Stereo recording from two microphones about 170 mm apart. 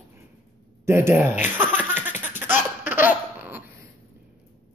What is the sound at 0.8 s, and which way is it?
Speech, 15° right (ahead or behind).